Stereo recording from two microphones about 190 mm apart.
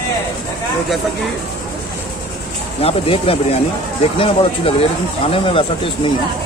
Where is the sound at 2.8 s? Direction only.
30° left (ahead or behind).